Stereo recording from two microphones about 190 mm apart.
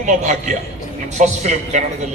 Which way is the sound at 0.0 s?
40° right (ahead or behind).